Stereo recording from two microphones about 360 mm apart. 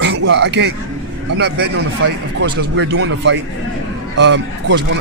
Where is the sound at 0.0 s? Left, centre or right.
Right.